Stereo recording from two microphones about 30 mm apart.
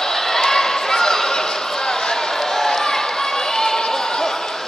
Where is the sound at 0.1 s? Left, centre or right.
Centre.